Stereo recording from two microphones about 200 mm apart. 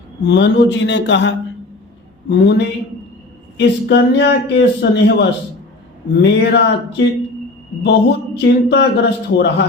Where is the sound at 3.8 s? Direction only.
60° left (ahead or behind).